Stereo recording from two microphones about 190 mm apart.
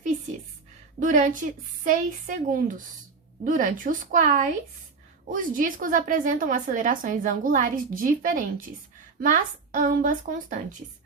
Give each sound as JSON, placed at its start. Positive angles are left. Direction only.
{"t": 0.9, "sound": "a woman's voice", "side_deg": -45}
{"t": 5.3, "sound": "a woman's voice", "side_deg": -45}